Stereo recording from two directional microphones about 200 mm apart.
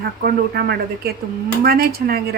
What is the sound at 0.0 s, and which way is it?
A woman's voice, 50° right (ahead or behind).